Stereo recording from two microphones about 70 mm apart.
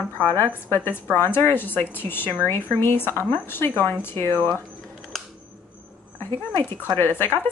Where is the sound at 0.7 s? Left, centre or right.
Left.